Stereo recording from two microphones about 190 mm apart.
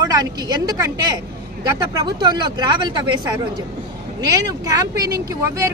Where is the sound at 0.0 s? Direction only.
20° right (ahead or behind).